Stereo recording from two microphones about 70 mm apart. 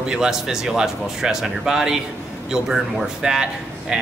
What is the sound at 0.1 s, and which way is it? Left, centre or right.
Speech, centre.